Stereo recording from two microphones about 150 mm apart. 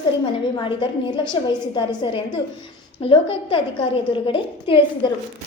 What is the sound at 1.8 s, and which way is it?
A woman's voice, 30° left (ahead or behind).